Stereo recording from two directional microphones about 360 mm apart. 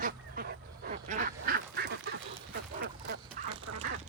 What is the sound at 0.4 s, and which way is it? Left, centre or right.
Dog, right.